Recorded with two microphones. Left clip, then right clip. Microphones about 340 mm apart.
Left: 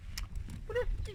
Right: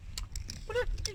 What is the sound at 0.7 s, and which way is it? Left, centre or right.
Honk, right.